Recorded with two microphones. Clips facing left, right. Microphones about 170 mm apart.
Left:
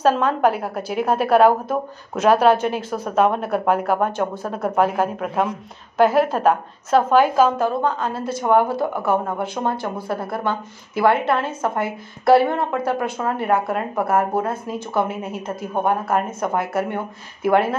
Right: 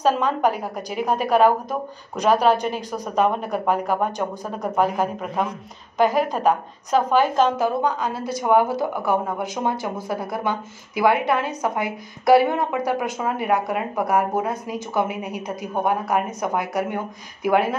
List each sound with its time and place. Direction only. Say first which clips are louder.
0.0 s a woman's voice: left 2 dB; 5° left (ahead or behind)
4.4 s speech: left 3 dB; 15° right (ahead or behind)
5.0 s a woman's voice: left 3 dB; 5° left (ahead or behind)
7.6 s a woman's voice: left 1 dB; 15° right (ahead or behind)
14.4 s a woman's voice: left 1 dB; 15° right (ahead or behind)
17.4 s speech: left 2 dB; 10° right (ahead or behind)